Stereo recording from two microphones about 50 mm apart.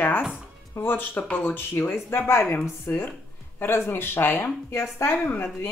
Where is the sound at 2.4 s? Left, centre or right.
Left.